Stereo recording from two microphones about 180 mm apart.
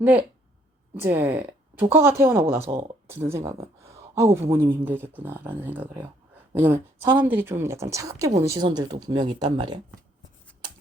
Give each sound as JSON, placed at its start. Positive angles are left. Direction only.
{"t": 0.0, "sound": "speech", "side_deg": -10}
{"t": 2.7, "sound": "speech", "side_deg": -25}
{"t": 3.1, "sound": "speech", "side_deg": -15}